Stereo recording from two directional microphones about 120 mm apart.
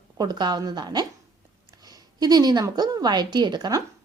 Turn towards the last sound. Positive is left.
turn(degrees=-35)  # may be behind; listen again after turning